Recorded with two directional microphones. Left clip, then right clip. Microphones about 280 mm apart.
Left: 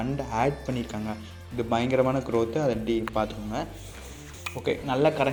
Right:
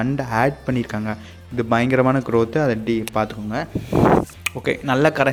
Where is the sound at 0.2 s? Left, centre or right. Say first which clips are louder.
Right 6 dB; right.